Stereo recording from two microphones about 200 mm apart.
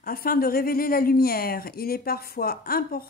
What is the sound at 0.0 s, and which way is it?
A woman's voice, 45° left (ahead or behind).